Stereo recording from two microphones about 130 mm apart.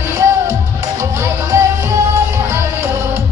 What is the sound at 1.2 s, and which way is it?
Music, 20° right (ahead or behind).